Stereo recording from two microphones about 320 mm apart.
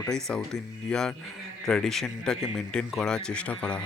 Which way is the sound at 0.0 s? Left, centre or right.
Centre.